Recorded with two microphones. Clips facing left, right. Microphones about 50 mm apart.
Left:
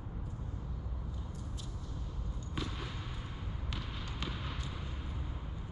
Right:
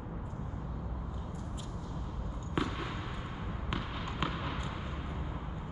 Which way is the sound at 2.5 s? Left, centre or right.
Right.